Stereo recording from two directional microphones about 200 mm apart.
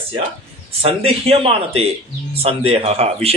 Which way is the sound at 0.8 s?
30° right (ahead or behind).